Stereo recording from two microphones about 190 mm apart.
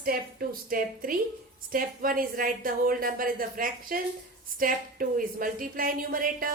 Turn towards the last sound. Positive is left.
turn(degrees=-50)  # may be behind; listen again after turning